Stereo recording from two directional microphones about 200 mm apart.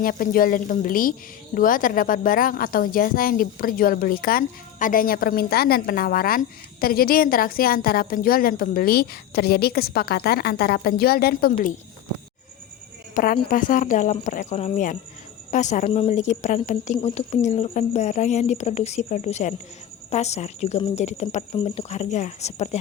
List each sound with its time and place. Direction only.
0.0 s speech: 45° left (ahead or behind)
13.1 s speech: 45° left (ahead or behind)